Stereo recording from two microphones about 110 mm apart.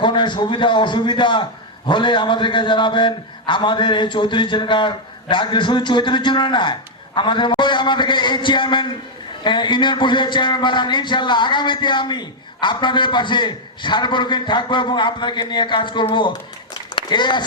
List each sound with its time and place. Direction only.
0.0 s a man's voice: 45° left (ahead or behind)